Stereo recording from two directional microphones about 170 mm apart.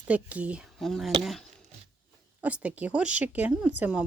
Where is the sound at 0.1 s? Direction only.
10° right (ahead or behind).